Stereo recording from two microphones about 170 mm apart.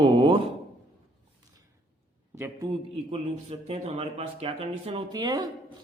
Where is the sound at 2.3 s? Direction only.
15° right (ahead or behind).